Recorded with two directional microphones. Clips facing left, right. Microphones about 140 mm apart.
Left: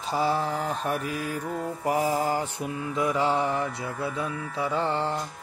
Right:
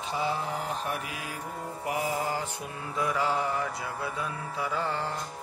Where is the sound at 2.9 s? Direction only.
25° left (ahead or behind).